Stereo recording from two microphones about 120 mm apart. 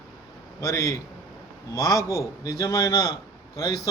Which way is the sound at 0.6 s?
25° left (ahead or behind).